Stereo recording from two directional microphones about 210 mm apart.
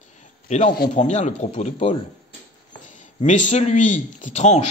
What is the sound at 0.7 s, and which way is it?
Speech, 40° left (ahead or behind).